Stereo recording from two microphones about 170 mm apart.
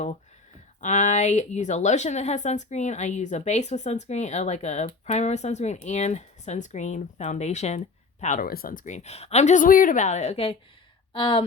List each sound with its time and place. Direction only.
0.8 s speech: 45° left (ahead or behind); by 11.4 s 30° left (ahead or behind)